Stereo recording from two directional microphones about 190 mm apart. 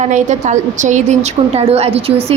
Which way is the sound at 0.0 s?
40° right (ahead or behind).